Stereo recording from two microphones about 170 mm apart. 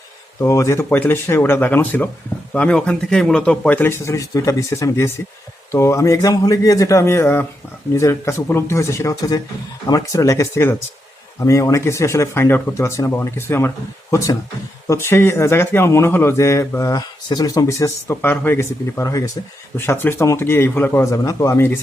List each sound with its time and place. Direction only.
0.3 s speech: 15° left (ahead or behind)